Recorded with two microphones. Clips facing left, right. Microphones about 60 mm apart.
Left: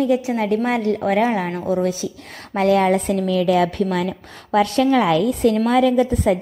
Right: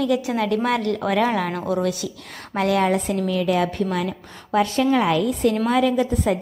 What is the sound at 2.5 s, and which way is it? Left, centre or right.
A woman's voice, left.